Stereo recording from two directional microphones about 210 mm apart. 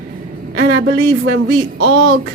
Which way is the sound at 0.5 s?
55° right (ahead or behind).